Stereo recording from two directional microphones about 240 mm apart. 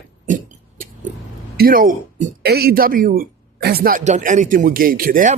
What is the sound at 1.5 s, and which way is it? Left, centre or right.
Speech, right.